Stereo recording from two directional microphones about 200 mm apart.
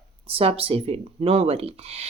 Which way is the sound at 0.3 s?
30° right (ahead or behind).